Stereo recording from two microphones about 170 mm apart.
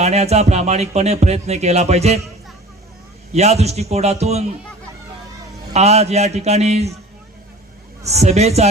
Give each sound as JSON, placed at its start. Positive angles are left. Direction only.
{"t": 0.0, "sound": "music", "side_deg": -40}
{"t": 3.3, "sound": "music", "side_deg": -40}
{"t": 5.7, "sound": "music", "side_deg": -40}
{"t": 8.0, "sound": "music", "side_deg": -40}